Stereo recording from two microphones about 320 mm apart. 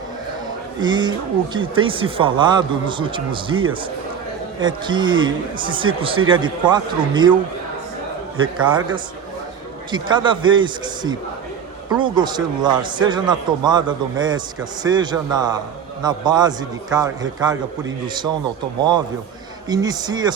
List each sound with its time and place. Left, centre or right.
0.8 s speech: centre
8.4 s speech: centre